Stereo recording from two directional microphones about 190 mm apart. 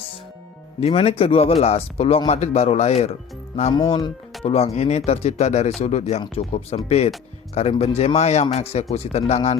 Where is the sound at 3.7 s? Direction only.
25° left (ahead or behind).